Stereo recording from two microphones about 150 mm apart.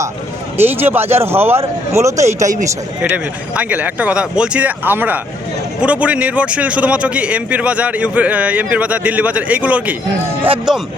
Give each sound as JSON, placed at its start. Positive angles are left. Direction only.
{"t": 0.5, "sound": "speech", "side_deg": -15}
{"t": 3.0, "sound": "speech", "side_deg": -10}